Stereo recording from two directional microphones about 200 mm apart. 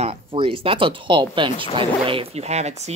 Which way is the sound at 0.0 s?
30° right (ahead or behind).